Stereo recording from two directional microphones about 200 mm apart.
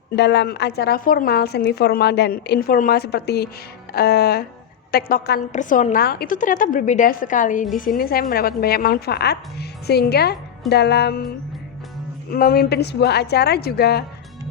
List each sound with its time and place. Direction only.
0.2 s a woman's voice: 60° left (ahead or behind)
5.5 s a woman's voice: 40° left (ahead or behind)
10.7 s music: 55° left (ahead or behind)
12.3 s a woman's voice: 50° left (ahead or behind)